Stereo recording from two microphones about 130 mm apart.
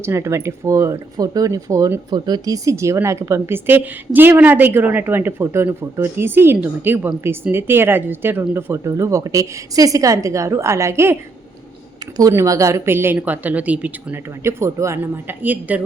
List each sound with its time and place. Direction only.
0.0 s speech: 20° right (ahead or behind)
12.3 s speech: 25° right (ahead or behind)